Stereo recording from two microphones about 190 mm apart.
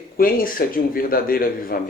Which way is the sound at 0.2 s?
50° left (ahead or behind).